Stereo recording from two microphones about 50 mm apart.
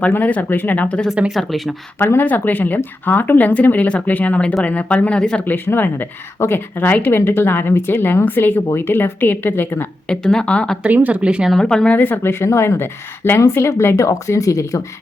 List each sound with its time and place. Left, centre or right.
0.2 s speech: left
0.5 s a woman's voice: left
0.8 s speech: left
1.3 s speech: centre
2.0 s a woman's voice: left
2.2 s speech: left; by 5.4 s centre
5.4 s a woman's voice: left
6.4 s speech: left
6.7 s a woman's voice: left
10.1 s speech: centre
10.8 s speech: right
11.5 s speech: centre
11.9 s a woman's voice: left
12.5 s speech: left